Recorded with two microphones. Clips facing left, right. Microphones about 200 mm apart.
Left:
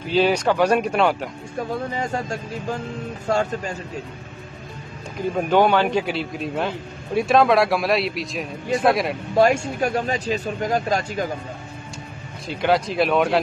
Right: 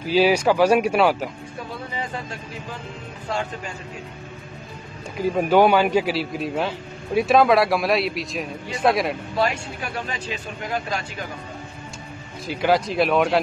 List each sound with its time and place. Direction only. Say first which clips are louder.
0.1 s speech: right 1 dB; 10° right (ahead or behind)
1.7 s speech: left 5 dB; 45° left (ahead or behind)
5.5 s a man's voice: right 1 dB; 10° right (ahead or behind)
9.3 s speech: left 6 dB; 45° left (ahead or behind)
12.4 s a man's voice: even; centre (ahead or behind)